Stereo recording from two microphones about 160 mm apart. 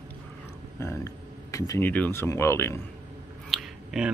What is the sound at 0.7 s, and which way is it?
Speech, 15° left (ahead or behind).